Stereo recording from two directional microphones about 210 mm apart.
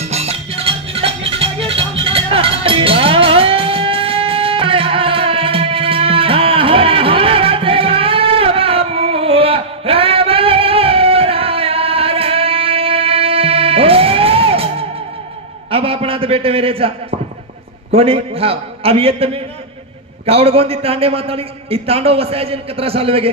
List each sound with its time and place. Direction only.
0.0 s music: 30° right (ahead or behind)
15.7 s a man's voice: 25° right (ahead or behind)
17.9 s a man's voice: 25° right (ahead or behind)